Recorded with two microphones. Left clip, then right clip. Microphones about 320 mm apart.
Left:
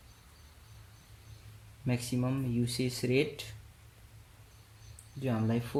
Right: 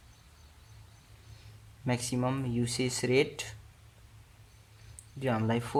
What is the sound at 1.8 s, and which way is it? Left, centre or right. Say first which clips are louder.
Speech: right 3 dB; centre.